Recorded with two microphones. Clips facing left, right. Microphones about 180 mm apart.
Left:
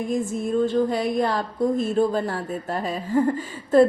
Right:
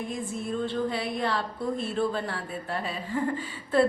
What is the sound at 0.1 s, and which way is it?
A woman's voice, 45° left (ahead or behind).